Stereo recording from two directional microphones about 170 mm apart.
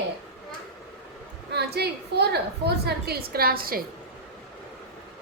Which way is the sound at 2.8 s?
65° right (ahead or behind).